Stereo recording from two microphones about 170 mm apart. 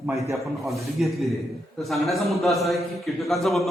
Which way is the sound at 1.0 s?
Centre (ahead or behind).